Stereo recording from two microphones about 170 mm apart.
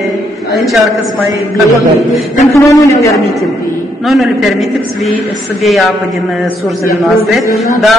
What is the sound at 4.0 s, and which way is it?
A woman's voice, centre (ahead or behind).